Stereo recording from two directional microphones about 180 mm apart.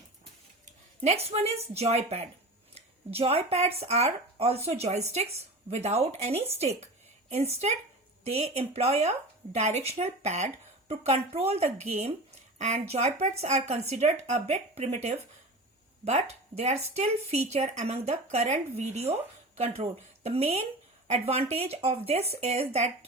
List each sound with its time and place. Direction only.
1.0 s speech: 35° right (ahead or behind)